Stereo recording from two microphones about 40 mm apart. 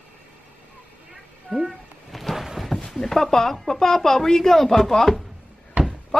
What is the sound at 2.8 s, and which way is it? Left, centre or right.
A woman's voice, centre.